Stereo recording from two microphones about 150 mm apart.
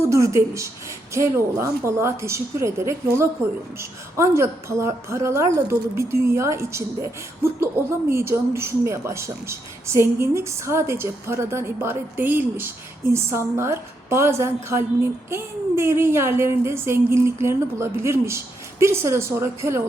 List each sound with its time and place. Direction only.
0.0 s speech: 20° right (ahead or behind)